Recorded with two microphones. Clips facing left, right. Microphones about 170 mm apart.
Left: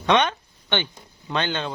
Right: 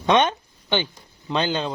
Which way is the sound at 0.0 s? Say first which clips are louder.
Right 1 dB; 20° right (ahead or behind).